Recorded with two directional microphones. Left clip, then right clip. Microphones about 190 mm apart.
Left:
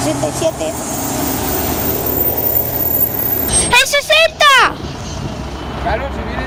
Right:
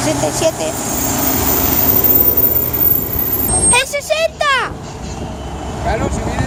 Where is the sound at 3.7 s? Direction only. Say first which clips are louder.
Left 4 dB; 20° left (ahead or behind).